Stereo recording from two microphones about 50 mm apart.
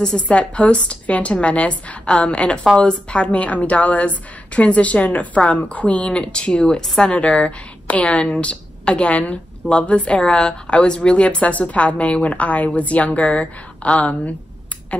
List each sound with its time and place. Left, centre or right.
0.0 s a woman's voice: left